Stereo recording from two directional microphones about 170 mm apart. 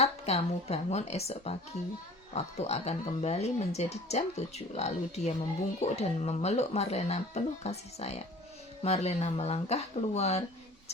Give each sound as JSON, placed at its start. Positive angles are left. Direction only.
{"t": 0.0, "sound": "speech", "side_deg": 40}